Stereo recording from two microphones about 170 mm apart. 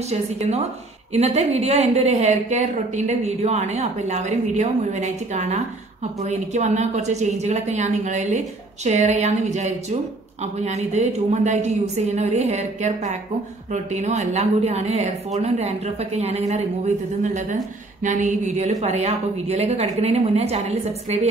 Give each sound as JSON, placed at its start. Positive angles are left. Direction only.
{"t": 0.1, "sound": "a woman's voice", "side_deg": -40}